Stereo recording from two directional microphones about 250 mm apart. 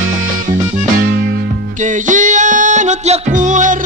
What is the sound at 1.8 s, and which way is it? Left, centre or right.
Music, right.